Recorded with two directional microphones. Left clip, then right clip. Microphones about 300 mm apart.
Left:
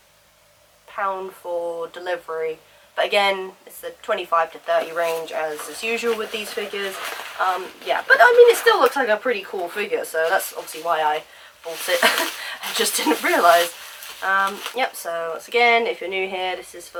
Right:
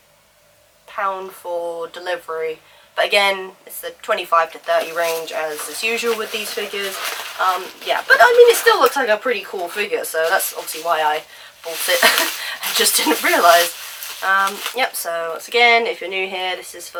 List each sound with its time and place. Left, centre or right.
0.9 s a woman's voice: centre
1.5 s speech: centre
2.0 s speech: centre